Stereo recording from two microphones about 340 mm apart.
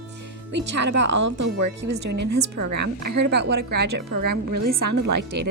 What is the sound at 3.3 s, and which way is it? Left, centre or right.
Speech, right.